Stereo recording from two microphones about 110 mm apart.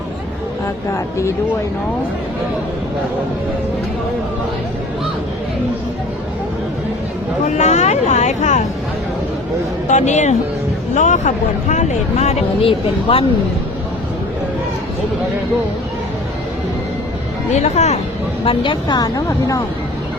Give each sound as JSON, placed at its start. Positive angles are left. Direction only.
{"t": 7.4, "sound": "speech", "side_deg": 90}
{"t": 9.9, "sound": "speech", "side_deg": 90}
{"t": 12.6, "sound": "speech", "side_deg": 55}
{"t": 17.5, "sound": "speech", "side_deg": 90}
{"t": 18.4, "sound": "speech", "side_deg": 50}